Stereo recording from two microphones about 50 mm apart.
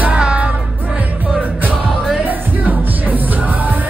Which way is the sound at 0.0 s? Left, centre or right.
Right.